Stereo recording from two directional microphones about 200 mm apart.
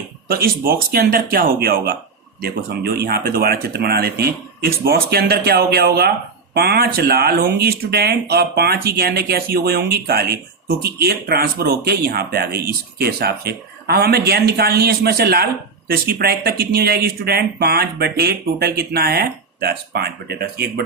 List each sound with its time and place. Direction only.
0.3 s speech: 50° right (ahead or behind)